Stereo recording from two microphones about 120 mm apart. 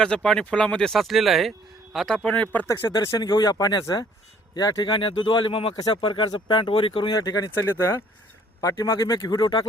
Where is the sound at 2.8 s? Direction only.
30° left (ahead or behind).